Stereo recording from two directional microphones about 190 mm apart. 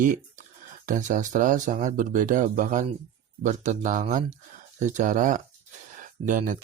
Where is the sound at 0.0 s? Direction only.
40° right (ahead or behind).